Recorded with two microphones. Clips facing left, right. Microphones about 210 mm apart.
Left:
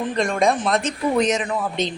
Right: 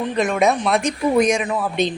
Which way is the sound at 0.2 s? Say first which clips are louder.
Right 2 dB; 5° right (ahead or behind).